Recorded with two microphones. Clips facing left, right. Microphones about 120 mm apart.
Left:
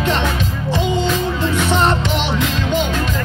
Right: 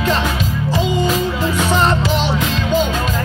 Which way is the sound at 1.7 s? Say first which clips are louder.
Right 1 dB; 20° left (ahead or behind).